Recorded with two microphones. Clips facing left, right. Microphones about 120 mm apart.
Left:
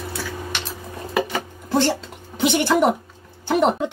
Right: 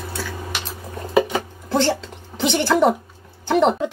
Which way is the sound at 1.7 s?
10° left (ahead or behind).